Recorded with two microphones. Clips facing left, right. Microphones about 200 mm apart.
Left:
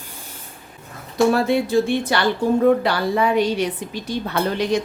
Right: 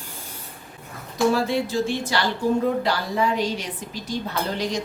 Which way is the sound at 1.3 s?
60° left (ahead or behind).